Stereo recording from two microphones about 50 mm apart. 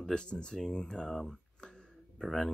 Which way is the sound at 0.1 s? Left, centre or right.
Centre.